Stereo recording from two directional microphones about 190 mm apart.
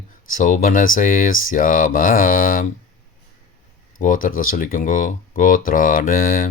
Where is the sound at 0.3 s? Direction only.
45° left (ahead or behind).